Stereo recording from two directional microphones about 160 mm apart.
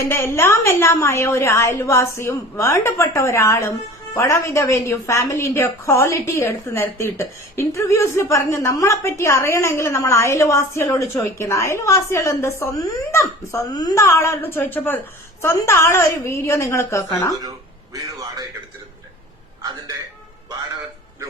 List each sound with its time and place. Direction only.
0.0 s a woman's voice: 15° left (ahead or behind)
17.9 s a man's voice: 20° right (ahead or behind)